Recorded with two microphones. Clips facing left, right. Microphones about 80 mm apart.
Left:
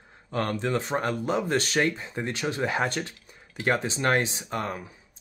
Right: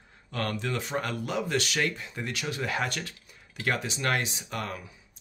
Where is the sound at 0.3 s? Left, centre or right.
Left.